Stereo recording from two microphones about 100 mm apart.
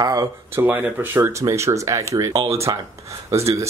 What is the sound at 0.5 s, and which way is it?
Speech, 20° right (ahead or behind).